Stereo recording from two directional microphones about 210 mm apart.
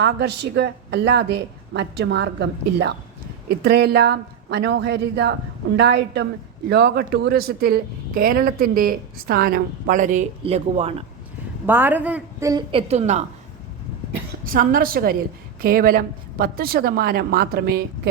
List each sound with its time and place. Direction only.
0.0 s speech: 55° right (ahead or behind); by 11.0 s 30° right (ahead or behind)
11.6 s a woman's voice: 10° right (ahead or behind)
12.9 s a woman's voice: 30° right (ahead or behind)
14.4 s speech: 40° right (ahead or behind)